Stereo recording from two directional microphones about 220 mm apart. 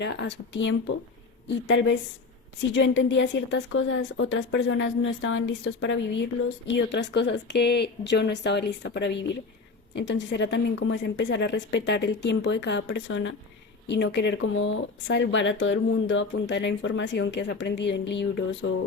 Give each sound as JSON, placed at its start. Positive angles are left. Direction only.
{"t": 0.0, "sound": "a woman's voice", "side_deg": 50}